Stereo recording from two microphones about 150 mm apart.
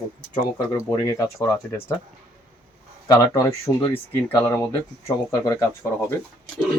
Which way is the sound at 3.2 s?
20° left (ahead or behind).